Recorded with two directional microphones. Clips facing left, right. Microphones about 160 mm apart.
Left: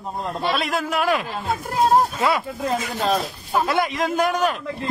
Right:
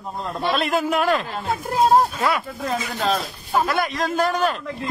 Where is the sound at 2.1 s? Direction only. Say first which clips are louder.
Left 1 dB; 20° left (ahead or behind).